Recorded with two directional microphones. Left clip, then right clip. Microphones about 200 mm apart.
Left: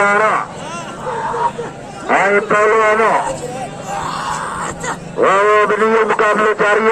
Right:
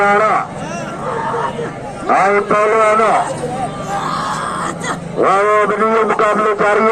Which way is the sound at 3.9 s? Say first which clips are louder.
Right 1 dB; centre (ahead or behind).